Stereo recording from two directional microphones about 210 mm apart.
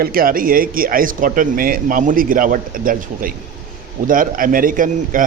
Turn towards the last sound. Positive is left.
turn(degrees=-40)  # may be behind; listen again after turning